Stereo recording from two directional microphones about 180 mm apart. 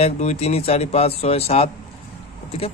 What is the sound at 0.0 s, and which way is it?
Speech, 35° left (ahead or behind).